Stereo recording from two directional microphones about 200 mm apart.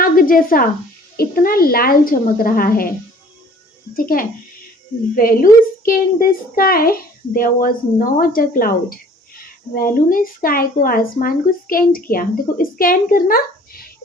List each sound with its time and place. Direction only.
0.0 s a sound: 45° left (ahead or behind)
1.1 s speech: 50° left (ahead or behind)
3.9 s speech: 45° left (ahead or behind)